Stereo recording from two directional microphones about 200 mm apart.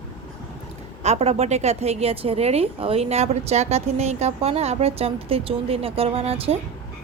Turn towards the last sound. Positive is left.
turn(degrees=-30)  # may be behind; listen again after turning